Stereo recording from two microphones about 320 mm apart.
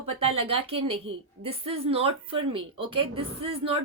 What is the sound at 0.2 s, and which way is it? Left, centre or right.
A woman's voice, centre.